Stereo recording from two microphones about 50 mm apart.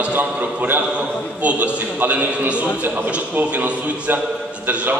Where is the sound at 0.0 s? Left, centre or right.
Right.